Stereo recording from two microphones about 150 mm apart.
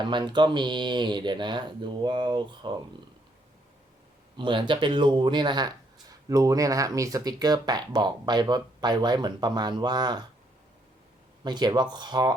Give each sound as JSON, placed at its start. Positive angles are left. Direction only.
{"t": 0.0, "sound": "speech", "side_deg": -30}
{"t": 4.4, "sound": "speech", "side_deg": -35}
{"t": 11.4, "sound": "speech", "side_deg": -30}